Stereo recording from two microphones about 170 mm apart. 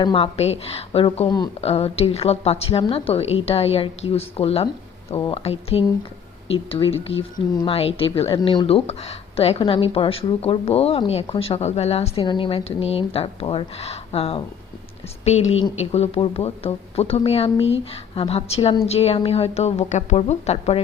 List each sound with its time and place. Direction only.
0.0 s a woman's voice: 35° left (ahead or behind)